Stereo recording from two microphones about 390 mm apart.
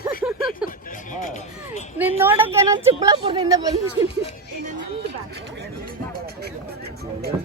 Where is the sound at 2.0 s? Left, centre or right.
Centre.